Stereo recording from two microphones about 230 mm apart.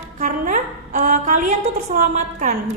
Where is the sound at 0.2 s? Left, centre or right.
Right.